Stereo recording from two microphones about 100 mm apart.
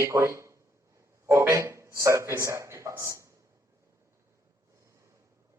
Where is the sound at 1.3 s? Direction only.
30° right (ahead or behind).